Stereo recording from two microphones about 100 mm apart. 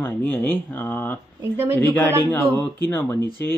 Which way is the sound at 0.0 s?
20° left (ahead or behind).